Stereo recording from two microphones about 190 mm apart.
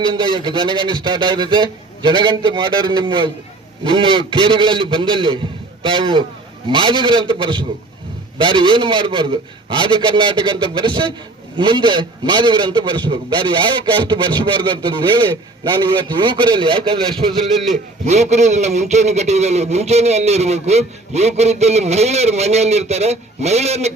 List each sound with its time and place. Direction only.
0.0 s a man's voice: 25° right (ahead or behind)